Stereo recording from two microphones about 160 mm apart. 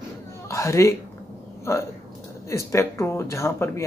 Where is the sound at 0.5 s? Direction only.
20° left (ahead or behind).